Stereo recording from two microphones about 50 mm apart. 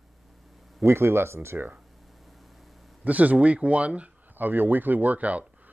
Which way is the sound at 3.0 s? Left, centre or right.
Right.